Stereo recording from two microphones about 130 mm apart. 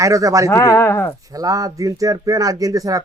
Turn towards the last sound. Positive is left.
turn(degrees=-25)  # may be behind; listen again after turning